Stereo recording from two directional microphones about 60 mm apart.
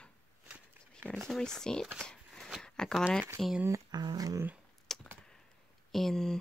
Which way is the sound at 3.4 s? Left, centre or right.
Centre.